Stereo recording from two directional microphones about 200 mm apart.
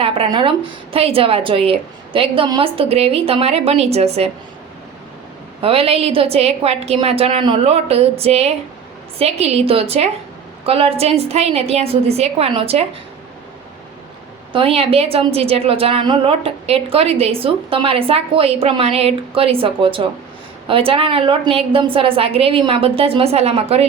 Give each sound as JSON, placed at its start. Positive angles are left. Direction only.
{"t": 0.0, "sound": "a woman's voice", "side_deg": -25}
{"t": 5.6, "sound": "a woman's voice", "side_deg": -30}
{"t": 14.5, "sound": "a woman's voice", "side_deg": -30}